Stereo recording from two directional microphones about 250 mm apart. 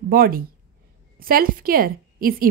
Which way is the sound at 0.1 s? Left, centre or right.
Right.